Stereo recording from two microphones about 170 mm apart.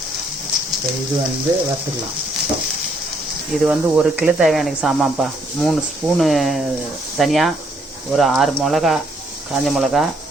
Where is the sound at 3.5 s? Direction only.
5° right (ahead or behind).